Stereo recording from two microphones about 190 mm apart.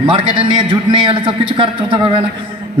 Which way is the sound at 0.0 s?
30° right (ahead or behind).